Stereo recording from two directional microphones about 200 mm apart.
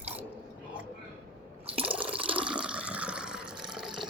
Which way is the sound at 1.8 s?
5° right (ahead or behind).